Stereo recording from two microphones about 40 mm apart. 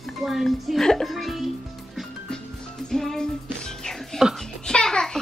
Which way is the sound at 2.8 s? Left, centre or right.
Centre.